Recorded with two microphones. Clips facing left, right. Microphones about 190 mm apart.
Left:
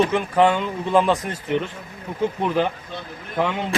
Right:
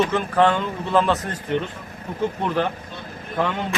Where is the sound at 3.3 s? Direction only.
10° left (ahead or behind).